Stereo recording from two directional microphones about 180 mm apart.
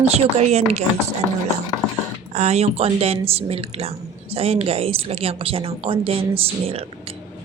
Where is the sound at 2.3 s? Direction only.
40° right (ahead or behind).